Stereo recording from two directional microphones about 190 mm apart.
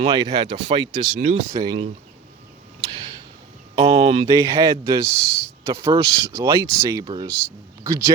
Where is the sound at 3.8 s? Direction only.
35° right (ahead or behind).